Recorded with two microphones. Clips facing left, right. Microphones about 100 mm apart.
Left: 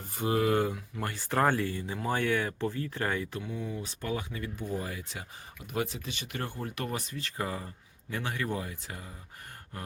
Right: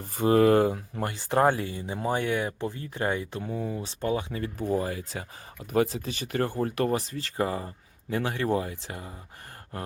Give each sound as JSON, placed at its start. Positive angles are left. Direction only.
{"t": 0.2, "sound": "speech", "side_deg": -45}
{"t": 1.0, "sound": "speech", "side_deg": -20}
{"t": 3.4, "sound": "speech", "side_deg": -40}
{"t": 3.8, "sound": "speech", "side_deg": -30}